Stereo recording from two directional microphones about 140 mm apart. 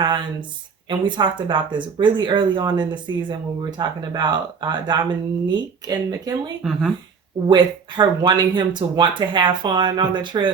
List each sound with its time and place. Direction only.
0.9 s speech: 35° right (ahead or behind)
6.6 s speech: 5° right (ahead or behind)
7.4 s speech: 35° right (ahead or behind)